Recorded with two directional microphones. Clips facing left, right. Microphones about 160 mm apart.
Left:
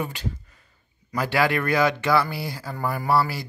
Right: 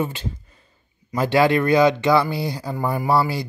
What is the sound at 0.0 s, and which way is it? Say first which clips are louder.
Speech: right 4 dB; 25° right (ahead or behind).